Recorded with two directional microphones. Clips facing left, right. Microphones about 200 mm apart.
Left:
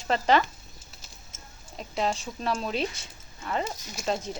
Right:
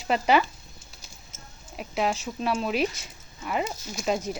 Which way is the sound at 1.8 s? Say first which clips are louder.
Right 2 dB; 10° right (ahead or behind).